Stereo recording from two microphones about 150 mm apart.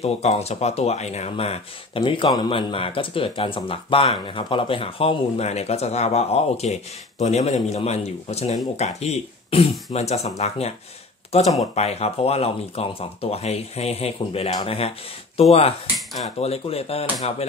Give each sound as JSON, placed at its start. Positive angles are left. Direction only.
{"t": 0.0, "sound": "speech", "side_deg": 45}
{"t": 2.0, "sound": "speech", "side_deg": 30}